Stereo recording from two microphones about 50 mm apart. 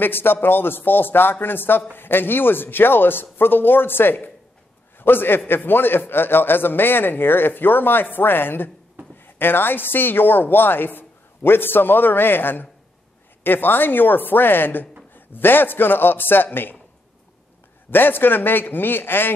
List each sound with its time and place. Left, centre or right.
0.0 s speech: left
17.9 s speech: left